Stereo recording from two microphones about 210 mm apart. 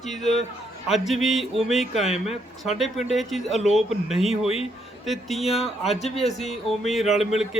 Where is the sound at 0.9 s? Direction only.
Centre (ahead or behind).